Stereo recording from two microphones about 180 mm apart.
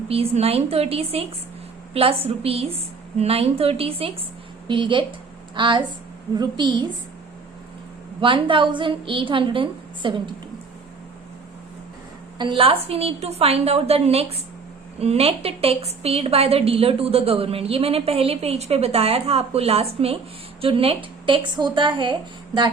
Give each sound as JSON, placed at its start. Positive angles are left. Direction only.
{"t": 0.1, "sound": "a woman's voice", "side_deg": -35}
{"t": 8.2, "sound": "a woman's voice", "side_deg": -30}
{"t": 12.4, "sound": "a woman's voice", "side_deg": -30}